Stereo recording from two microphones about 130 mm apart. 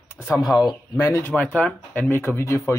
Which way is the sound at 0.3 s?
30° left (ahead or behind).